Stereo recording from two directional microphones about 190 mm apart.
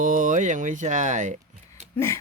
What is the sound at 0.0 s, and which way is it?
Speech, 45° right (ahead or behind).